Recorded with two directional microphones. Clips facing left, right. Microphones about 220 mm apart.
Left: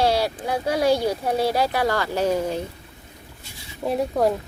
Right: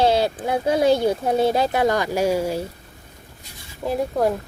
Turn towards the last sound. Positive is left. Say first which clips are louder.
# even
turn(degrees=0)  # may be behind; listen again after turning